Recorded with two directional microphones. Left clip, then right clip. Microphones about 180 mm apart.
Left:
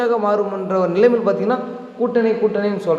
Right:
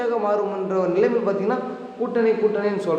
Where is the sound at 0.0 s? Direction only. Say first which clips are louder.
Left 4 dB; 30° left (ahead or behind).